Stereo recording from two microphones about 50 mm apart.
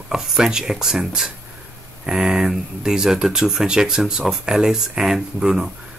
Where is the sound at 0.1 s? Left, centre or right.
Centre.